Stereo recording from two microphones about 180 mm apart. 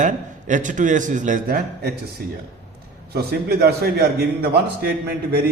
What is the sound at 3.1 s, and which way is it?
A man's voice, 60° right (ahead or behind).